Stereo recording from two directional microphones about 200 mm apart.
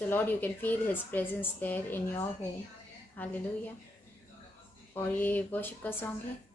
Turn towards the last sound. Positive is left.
turn(degrees=10)  # may be behind; listen again after turning